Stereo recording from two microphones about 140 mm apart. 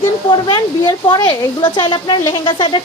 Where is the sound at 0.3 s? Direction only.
35° left (ahead or behind).